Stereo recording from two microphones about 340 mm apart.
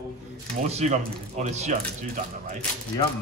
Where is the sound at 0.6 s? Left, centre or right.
Centre.